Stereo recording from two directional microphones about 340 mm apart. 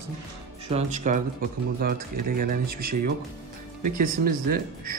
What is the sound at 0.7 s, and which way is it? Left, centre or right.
Speech, right.